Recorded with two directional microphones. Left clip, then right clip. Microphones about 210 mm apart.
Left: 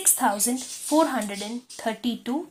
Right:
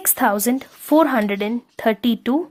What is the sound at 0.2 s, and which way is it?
A woman's voice, 45° right (ahead or behind).